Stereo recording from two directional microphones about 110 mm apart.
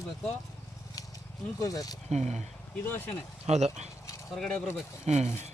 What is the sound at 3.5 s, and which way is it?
Speech, 75° right (ahead or behind).